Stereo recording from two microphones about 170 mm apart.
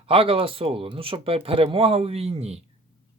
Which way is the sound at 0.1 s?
35° right (ahead or behind).